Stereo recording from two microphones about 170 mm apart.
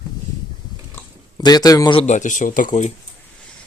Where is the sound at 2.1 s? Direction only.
45° left (ahead or behind).